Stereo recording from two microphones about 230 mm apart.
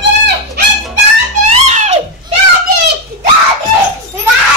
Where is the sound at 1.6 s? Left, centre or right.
Right.